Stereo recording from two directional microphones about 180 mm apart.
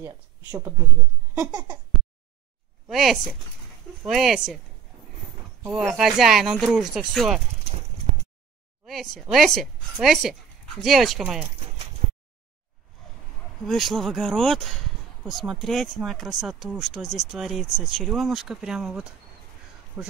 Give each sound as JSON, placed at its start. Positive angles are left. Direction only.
{"t": 0.0, "sound": "speech", "side_deg": -15}
{"t": 2.9, "sound": "speech", "side_deg": 0}
{"t": 5.7, "sound": "speech", "side_deg": 0}
{"t": 8.8, "sound": "a woman's voice", "side_deg": 0}
{"t": 13.7, "sound": "speech", "side_deg": 0}